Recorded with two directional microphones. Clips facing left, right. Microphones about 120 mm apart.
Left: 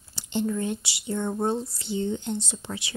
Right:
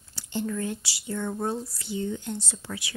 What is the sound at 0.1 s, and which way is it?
Speech, 20° left (ahead or behind).